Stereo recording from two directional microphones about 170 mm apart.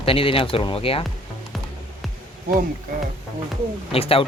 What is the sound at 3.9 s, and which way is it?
Speech, 35° left (ahead or behind).